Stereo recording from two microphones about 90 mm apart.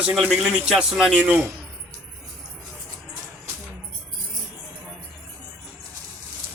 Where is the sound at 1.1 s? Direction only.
15° right (ahead or behind).